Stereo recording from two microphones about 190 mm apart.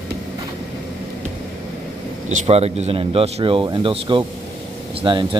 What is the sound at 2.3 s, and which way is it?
Speech, 35° right (ahead or behind).